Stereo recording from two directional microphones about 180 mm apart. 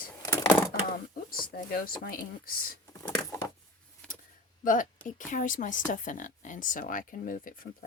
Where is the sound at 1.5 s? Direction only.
55° left (ahead or behind).